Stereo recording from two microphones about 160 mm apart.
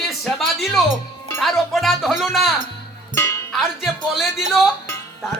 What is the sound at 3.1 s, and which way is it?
Music, 20° left (ahead or behind).